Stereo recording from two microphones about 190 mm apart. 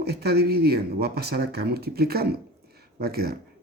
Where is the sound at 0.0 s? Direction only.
60° right (ahead or behind).